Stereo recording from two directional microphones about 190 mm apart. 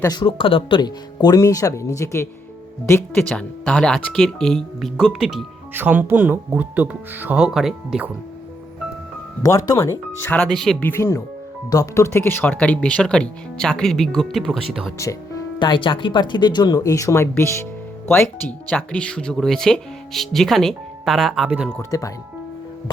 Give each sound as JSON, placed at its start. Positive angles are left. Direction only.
{"t": 0.0, "sound": "speech", "side_deg": 20}
{"t": 9.4, "sound": "speech", "side_deg": 15}
{"t": 15.6, "sound": "speech", "side_deg": 25}
{"t": 21.7, "sound": "speech", "side_deg": 15}